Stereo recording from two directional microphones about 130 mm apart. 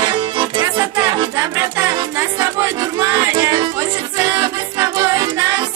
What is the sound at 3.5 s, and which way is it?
Music, 35° right (ahead or behind).